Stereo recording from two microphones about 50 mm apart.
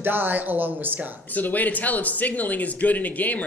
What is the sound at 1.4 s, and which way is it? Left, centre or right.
Speech, left.